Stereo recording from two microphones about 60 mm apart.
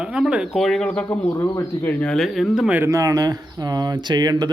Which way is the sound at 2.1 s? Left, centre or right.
Centre.